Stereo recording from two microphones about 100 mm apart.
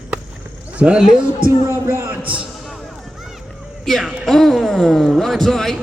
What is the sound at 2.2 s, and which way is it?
Speech, 10° right (ahead or behind).